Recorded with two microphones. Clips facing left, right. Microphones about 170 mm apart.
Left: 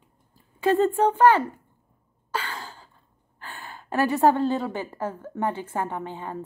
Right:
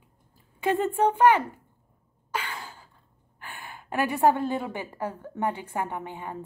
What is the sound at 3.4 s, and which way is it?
A woman's voice, 10° right (ahead or behind).